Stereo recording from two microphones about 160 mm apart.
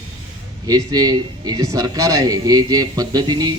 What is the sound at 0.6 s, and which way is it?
A man's voice, 25° right (ahead or behind).